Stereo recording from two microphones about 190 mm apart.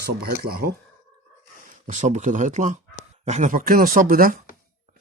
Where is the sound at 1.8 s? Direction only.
40° right (ahead or behind).